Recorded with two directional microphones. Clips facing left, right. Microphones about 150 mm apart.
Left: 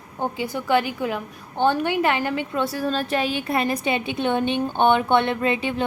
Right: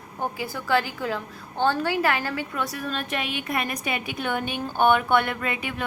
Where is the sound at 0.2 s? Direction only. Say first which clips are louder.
Left 4 dB; 20° left (ahead or behind).